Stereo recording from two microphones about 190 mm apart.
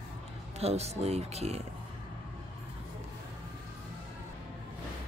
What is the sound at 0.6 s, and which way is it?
Speech, 35° right (ahead or behind).